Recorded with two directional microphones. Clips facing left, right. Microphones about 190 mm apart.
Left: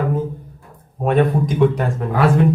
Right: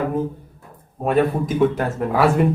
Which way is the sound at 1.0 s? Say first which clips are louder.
Left 2 dB; 5° right (ahead or behind).